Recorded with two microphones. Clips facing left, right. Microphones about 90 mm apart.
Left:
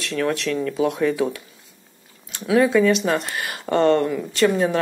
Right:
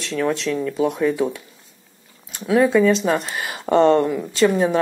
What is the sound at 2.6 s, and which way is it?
Speech, 15° right (ahead or behind).